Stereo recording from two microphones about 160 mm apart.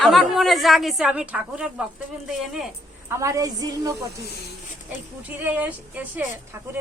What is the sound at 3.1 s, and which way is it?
Speech, 20° right (ahead or behind).